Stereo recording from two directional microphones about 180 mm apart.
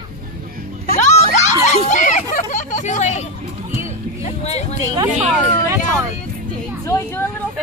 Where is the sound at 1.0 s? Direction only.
40° left (ahead or behind).